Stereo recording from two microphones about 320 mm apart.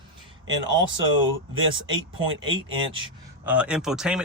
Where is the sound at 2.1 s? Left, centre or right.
Centre.